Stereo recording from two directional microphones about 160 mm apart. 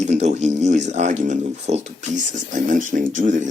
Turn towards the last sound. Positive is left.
turn(degrees=-50)  # may be behind; listen again after turning